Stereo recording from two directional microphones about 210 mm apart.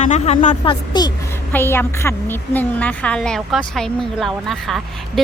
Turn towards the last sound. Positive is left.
turn(degrees=0)  # may be behind; listen again after turning